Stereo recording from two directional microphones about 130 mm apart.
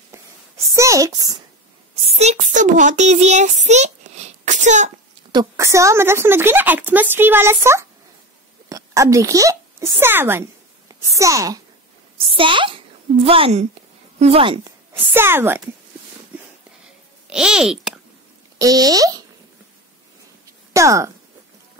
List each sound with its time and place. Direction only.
0.7 s speech: 25° right (ahead or behind)
2.0 s a child's voice: 55° right (ahead or behind)
3.6 s a sound: 60° right (ahead or behind)
5.3 s a woman's voice: 25° right (ahead or behind)
12.2 s a woman's voice: 45° right (ahead or behind)
15.0 s a woman's voice: 15° right (ahead or behind)
17.3 s a child's voice: 5° right (ahead or behind)
18.6 s a child's voice: 30° right (ahead or behind)
20.7 s speech: 25° right (ahead or behind)